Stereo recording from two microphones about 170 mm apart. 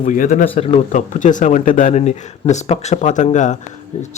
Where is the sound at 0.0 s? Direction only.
50° left (ahead or behind).